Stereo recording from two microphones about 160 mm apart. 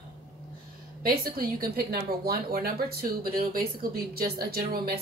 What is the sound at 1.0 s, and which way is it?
Speech, 65° right (ahead or behind).